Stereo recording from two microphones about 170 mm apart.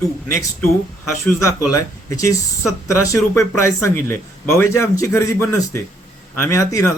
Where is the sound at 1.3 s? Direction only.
20° left (ahead or behind).